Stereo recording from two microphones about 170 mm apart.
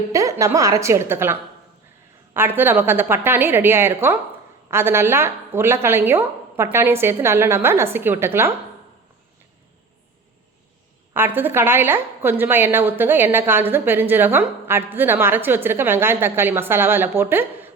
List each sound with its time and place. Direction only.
0.1 s a woman's voice: 20° right (ahead or behind)
11.1 s a woman's voice: 10° right (ahead or behind)